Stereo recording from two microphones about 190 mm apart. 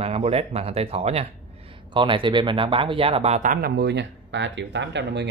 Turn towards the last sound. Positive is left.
turn(degrees=-65)  # may be behind; listen again after turning